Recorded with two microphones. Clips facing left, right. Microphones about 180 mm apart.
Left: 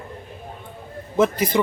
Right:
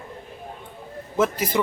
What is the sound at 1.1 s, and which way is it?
Speech, 5° right (ahead or behind).